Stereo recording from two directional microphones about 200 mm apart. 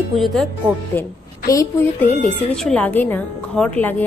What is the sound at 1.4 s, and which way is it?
Music, 15° left (ahead or behind).